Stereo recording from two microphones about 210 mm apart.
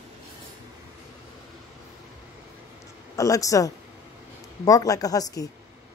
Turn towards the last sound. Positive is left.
turn(degrees=15)  # may be behind; listen again after turning